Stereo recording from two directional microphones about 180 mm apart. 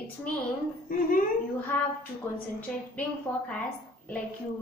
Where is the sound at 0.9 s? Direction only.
50° left (ahead or behind).